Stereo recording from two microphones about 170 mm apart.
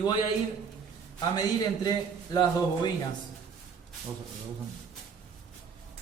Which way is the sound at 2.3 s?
25° left (ahead or behind).